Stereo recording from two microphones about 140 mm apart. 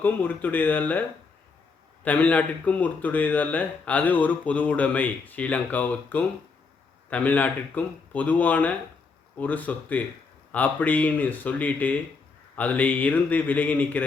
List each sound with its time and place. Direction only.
0.0 s speech: 15° left (ahead or behind)
2.0 s speech: 10° left (ahead or behind)